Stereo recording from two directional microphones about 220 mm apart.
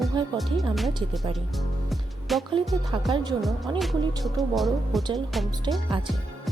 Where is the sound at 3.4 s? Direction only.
Centre (ahead or behind).